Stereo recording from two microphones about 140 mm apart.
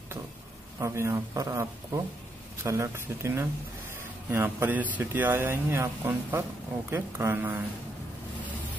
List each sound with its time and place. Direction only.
0.7 s speech: 20° right (ahead or behind)